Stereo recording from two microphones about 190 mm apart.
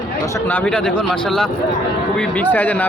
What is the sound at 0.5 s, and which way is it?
A man's voice, 5° left (ahead or behind).